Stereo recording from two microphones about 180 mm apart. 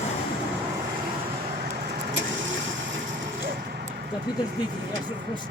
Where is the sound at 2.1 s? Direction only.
90° right.